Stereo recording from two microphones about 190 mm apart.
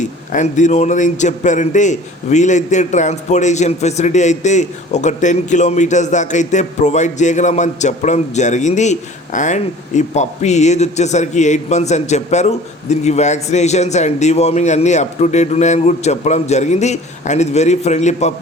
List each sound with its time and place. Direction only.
0.0 s a man's voice: 40° left (ahead or behind)